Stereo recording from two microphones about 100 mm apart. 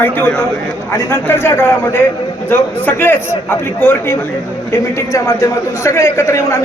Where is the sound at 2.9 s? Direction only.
20° left (ahead or behind).